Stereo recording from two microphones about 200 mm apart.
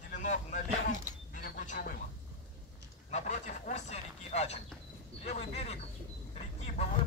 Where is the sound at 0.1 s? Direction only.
40° left (ahead or behind).